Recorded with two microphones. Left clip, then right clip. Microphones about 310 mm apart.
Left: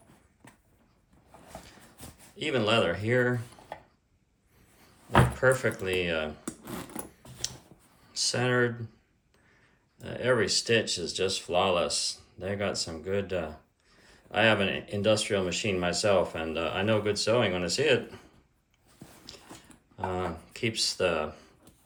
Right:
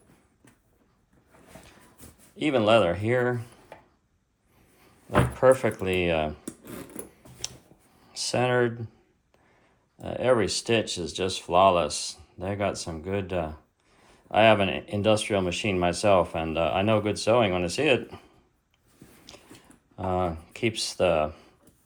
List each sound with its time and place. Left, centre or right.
2.4 s speech: centre
5.4 s speech: centre
8.1 s speech: centre
10.0 s speech: centre
19.3 s gears: centre
20.0 s speech: centre